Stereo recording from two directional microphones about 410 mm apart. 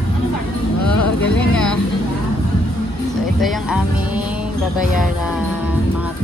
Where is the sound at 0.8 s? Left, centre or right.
Left.